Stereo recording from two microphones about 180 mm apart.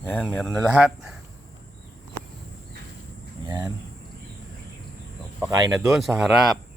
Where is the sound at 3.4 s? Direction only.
25° right (ahead or behind).